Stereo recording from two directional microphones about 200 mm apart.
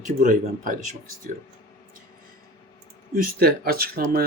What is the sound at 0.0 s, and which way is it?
Speech, 40° right (ahead or behind).